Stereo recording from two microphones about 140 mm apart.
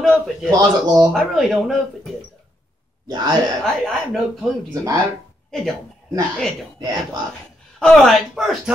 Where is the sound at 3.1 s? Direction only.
30° right (ahead or behind).